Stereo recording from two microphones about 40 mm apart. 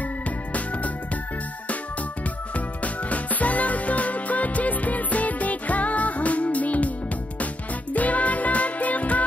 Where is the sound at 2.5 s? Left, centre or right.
Left.